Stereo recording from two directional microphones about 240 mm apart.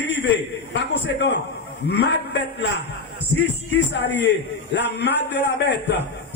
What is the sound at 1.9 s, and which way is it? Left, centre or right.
Speech, left.